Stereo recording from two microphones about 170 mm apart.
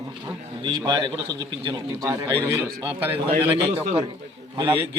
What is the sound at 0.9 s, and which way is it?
A man's voice, 25° right (ahead or behind).